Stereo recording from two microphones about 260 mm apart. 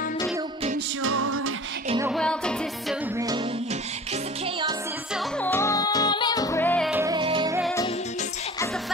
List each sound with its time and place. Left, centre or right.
1.0 s music: right
2.1 s music: centre
5.1 s music: centre
6.9 s music: centre